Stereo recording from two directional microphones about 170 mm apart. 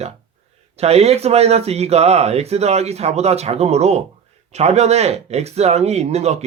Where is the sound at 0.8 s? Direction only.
40° right (ahead or behind).